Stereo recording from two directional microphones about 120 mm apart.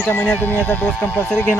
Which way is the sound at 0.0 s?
15° left (ahead or behind).